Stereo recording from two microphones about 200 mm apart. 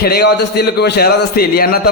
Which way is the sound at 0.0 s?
55° left (ahead or behind).